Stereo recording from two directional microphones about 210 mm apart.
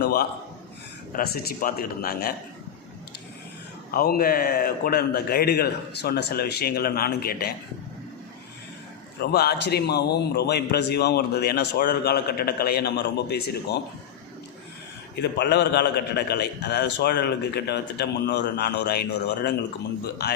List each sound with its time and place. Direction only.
0.0 s a man's voice: 50° left (ahead or behind)
3.9 s a man's voice: 45° left (ahead or behind)
9.2 s a man's voice: 50° left (ahead or behind)
15.2 s a man's voice: 55° left (ahead or behind)